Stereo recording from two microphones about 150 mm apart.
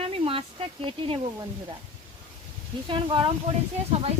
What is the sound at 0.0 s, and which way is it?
Speech, 40° right (ahead or behind).